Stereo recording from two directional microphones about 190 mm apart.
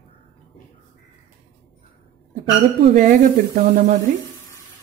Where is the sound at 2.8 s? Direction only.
45° right (ahead or behind).